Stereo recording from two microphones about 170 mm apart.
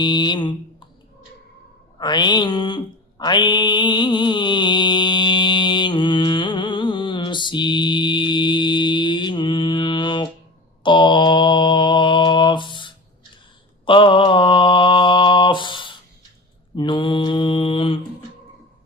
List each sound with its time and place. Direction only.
0.0 s speech: 25° left (ahead or behind)
2.0 s mantra: 25° left (ahead or behind)